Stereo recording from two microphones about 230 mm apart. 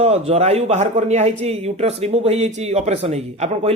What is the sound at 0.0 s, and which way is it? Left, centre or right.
Speech, right.